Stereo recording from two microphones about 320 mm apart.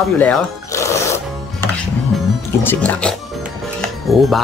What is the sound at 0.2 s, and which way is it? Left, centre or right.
Speech, centre.